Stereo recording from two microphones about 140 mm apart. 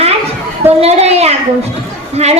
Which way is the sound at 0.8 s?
50° right (ahead or behind).